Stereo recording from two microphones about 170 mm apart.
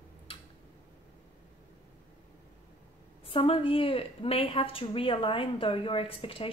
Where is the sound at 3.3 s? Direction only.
35° left (ahead or behind).